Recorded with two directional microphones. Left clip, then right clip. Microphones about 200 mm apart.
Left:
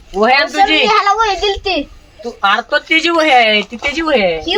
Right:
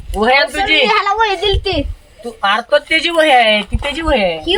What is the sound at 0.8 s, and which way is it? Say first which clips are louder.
Speech: left 2 dB; 25° right (ahead or behind).